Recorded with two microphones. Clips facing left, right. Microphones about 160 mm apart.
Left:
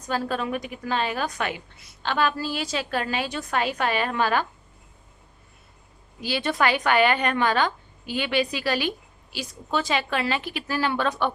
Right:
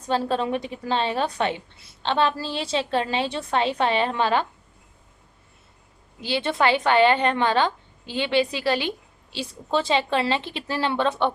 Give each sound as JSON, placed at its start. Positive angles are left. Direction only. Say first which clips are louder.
{"t": 0.0, "sound": "a woman's voice", "louder": "right 3 dB", "side_deg": -25}
{"t": 6.1, "sound": "a woman's voice", "louder": "right 1 dB", "side_deg": -25}